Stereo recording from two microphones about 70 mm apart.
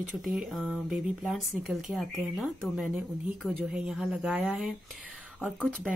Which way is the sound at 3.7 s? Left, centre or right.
Centre.